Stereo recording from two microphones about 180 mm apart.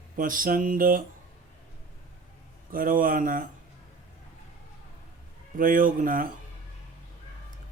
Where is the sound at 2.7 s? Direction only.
50° right (ahead or behind).